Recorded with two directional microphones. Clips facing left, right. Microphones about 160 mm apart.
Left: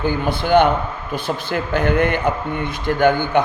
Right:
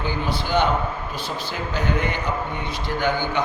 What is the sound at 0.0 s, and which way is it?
A man's voice, 55° left (ahead or behind).